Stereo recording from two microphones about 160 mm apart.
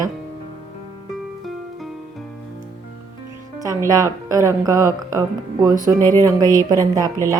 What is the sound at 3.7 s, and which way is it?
A woman's voice, 20° right (ahead or behind).